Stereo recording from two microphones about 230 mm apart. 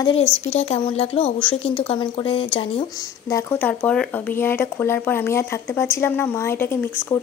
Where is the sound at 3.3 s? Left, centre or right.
Centre.